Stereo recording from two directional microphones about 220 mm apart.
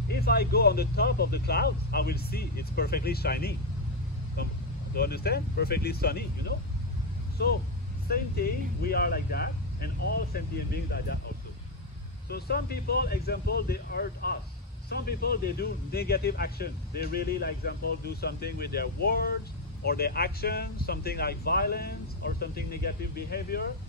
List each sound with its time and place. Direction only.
0.1 s speech: 45° left (ahead or behind)
4.9 s speech: 45° left (ahead or behind)
7.4 s speech: 45° left (ahead or behind)
12.3 s speech: 45° left (ahead or behind)